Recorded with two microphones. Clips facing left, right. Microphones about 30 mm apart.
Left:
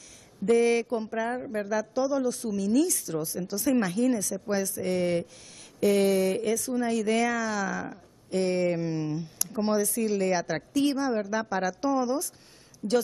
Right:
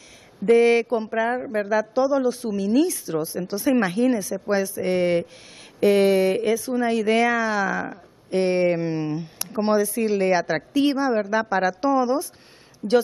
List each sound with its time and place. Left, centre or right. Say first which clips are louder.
0.5 s speech: right 6 dB; right
12.8 s speech: right 6 dB; right